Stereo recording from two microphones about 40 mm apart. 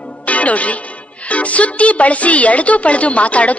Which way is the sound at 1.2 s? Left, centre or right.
Left.